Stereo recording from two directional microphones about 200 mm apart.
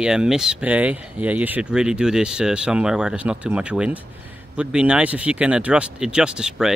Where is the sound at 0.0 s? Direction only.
5° right (ahead or behind).